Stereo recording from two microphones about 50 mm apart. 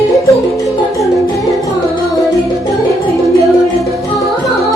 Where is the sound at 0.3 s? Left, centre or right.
Left.